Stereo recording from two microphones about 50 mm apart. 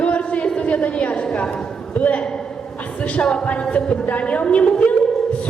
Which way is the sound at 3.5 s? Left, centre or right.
Left.